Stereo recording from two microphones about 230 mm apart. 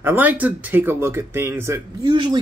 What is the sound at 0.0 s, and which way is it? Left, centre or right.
Speech, centre.